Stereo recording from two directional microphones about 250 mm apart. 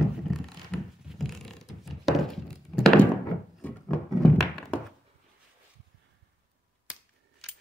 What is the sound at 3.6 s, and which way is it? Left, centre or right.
Thunk, centre.